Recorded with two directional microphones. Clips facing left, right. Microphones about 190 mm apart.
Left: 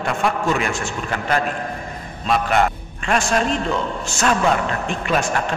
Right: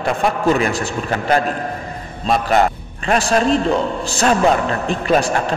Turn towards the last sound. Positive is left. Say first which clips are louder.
# right 4 dB
turn(degrees=-35)  # may be behind; listen again after turning